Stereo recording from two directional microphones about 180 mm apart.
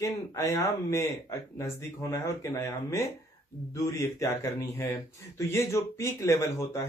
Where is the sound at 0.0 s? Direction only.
20° left (ahead or behind).